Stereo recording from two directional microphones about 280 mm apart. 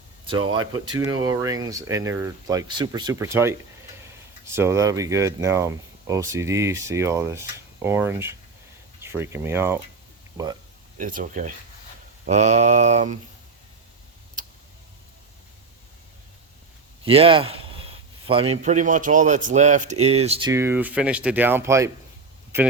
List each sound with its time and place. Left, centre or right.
0.4 s speech: right
0.7 s speech: centre
4.5 s speech: centre
10.9 s speech: right
14.4 s tick-tock: right
17.1 s speech: centre
20.5 s speech: centre